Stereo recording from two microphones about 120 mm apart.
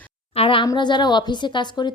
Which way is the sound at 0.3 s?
45° left (ahead or behind).